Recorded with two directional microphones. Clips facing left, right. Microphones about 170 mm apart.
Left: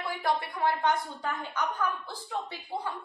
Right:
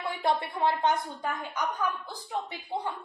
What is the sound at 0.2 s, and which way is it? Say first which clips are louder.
Speech: right 2 dB; 25° right (ahead or behind).